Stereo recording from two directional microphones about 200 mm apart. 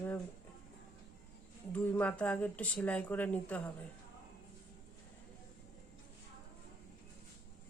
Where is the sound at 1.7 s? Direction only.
5° left (ahead or behind).